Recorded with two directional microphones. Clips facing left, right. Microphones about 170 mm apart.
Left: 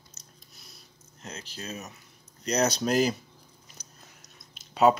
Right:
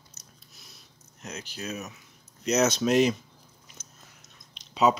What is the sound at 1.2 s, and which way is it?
Speech, 30° left (ahead or behind).